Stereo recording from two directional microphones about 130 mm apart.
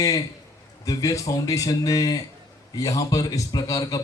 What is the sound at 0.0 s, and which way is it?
A man's voice, 30° left (ahead or behind).